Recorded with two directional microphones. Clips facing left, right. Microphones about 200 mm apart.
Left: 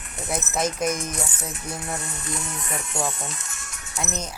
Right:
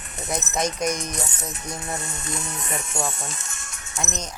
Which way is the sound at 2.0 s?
25° right (ahead or behind).